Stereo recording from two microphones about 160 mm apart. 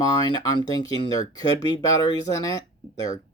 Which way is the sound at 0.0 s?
25° left (ahead or behind).